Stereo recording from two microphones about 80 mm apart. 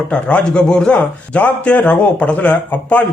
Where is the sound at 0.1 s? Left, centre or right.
Centre.